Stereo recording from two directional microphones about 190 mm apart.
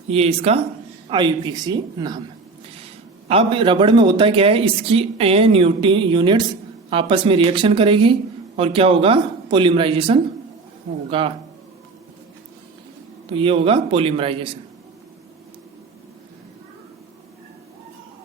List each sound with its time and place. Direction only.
0.1 s speech: 30° right (ahead or behind)
3.2 s speech: 30° right (ahead or behind)
13.3 s speech: 25° right (ahead or behind)